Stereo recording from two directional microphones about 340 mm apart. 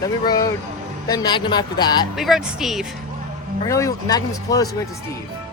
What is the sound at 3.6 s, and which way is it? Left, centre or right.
Speech, centre.